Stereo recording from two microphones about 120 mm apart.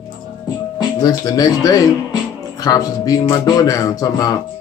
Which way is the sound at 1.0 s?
30° left (ahead or behind).